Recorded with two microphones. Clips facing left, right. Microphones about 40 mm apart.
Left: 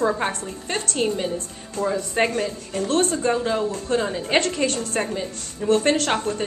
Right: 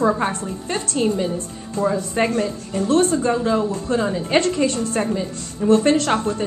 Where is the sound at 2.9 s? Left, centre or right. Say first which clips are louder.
Right 5 dB; left.